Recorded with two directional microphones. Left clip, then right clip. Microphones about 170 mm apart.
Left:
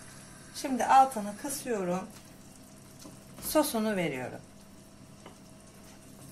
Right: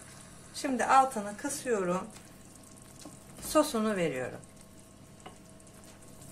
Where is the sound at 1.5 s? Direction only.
25° right (ahead or behind).